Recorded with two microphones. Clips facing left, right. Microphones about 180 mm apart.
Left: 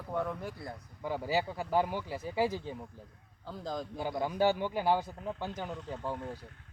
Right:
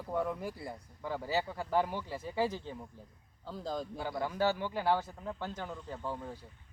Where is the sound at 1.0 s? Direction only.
15° left (ahead or behind).